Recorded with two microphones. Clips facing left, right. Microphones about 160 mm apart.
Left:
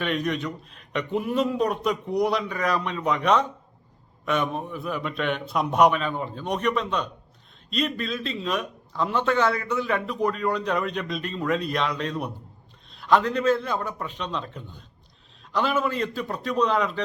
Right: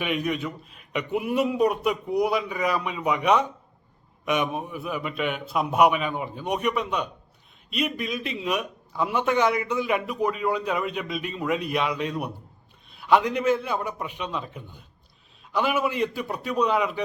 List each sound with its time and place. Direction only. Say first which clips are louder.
0.0 s a man's voice: even; 10° right (ahead or behind)